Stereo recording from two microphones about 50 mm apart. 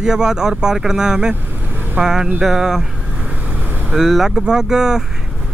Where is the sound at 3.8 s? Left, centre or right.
Centre.